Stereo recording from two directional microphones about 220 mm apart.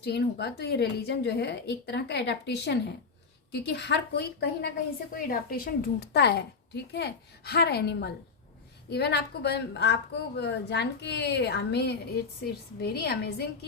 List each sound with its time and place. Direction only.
0.0 s a woman's voice: 45° left (ahead or behind)